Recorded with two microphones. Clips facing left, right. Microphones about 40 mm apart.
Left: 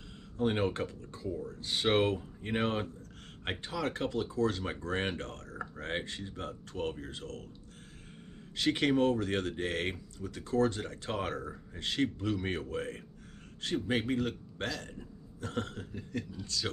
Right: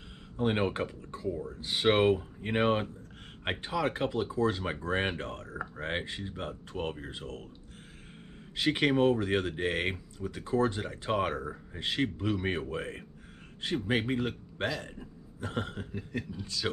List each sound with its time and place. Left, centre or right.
0.4 s speech: centre
8.5 s speech: centre